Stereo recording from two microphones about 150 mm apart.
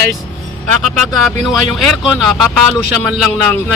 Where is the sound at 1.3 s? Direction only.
Centre (ahead or behind).